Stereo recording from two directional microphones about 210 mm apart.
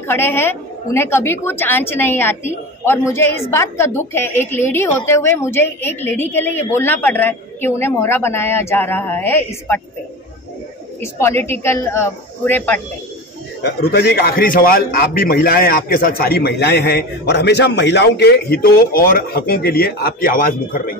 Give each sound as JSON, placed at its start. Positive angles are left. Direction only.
{"t": 0.0, "sound": "a woman's voice", "side_deg": 10}
{"t": 11.0, "sound": "a woman's voice", "side_deg": 10}
{"t": 13.6, "sound": "a man's voice", "side_deg": 50}